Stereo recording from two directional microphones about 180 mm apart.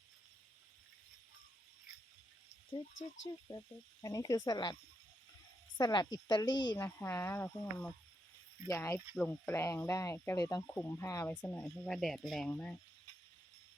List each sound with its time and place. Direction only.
3.0 s speech: 90° left
4.0 s speech: 20° left (ahead or behind)